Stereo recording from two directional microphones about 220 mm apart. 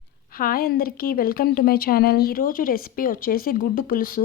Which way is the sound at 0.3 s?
40° left (ahead or behind).